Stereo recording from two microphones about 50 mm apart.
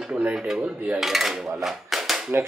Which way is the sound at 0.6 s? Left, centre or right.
Right.